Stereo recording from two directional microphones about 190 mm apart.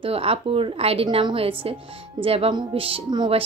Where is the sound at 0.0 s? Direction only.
30° right (ahead or behind).